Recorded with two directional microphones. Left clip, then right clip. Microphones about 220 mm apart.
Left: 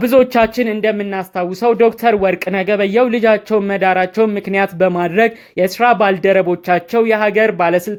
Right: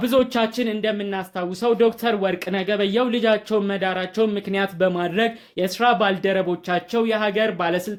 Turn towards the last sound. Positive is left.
turn(degrees=30)  # may be behind; listen again after turning